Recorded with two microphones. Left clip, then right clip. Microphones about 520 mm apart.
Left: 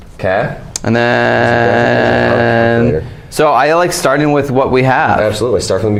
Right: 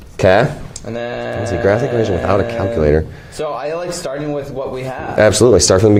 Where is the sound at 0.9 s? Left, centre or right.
Left.